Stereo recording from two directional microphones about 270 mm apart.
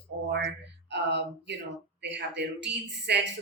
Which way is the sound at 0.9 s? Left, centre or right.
Right.